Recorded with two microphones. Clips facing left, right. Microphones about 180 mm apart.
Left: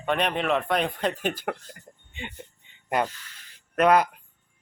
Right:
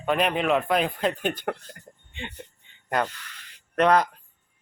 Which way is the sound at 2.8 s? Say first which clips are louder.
Even; 10° left (ahead or behind).